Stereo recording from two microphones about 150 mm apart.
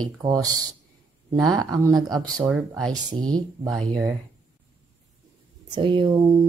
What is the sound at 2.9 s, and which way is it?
Speech, 25° right (ahead or behind).